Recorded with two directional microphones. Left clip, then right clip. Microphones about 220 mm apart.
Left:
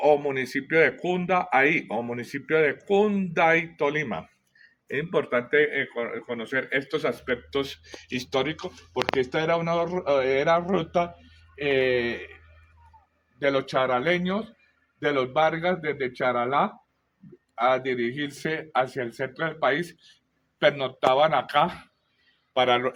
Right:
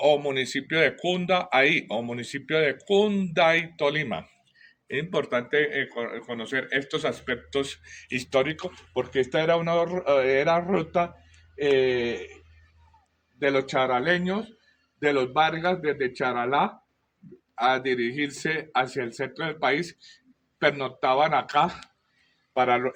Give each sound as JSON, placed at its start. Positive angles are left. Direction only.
{"t": 0.0, "sound": "speech", "side_deg": -15}
{"t": 13.4, "sound": "speech", "side_deg": 15}